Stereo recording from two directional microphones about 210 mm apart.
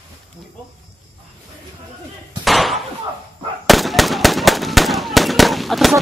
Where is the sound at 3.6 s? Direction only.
Centre (ahead or behind).